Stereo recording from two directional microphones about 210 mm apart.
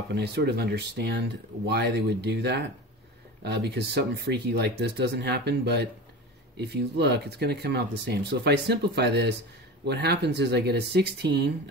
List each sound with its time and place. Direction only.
0.1 s speech: 55° right (ahead or behind)